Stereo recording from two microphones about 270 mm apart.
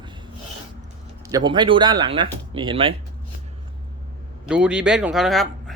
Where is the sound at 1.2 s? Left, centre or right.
Centre.